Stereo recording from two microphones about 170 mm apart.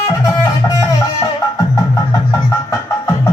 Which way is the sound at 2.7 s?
15° left (ahead or behind).